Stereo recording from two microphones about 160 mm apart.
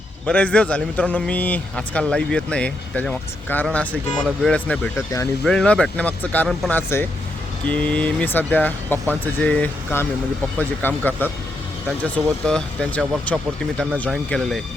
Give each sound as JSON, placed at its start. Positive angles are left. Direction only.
{"t": 0.3, "sound": "a man's voice", "side_deg": 10}